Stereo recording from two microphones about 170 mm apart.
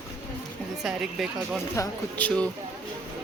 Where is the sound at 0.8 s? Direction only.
Centre (ahead or behind).